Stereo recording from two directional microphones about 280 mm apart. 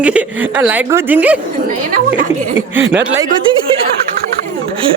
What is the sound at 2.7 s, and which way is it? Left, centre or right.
Speech, centre.